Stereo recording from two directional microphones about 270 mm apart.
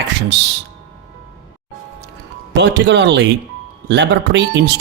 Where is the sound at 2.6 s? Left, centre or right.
Right.